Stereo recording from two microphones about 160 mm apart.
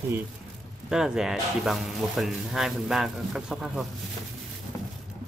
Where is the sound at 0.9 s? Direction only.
5° right (ahead or behind).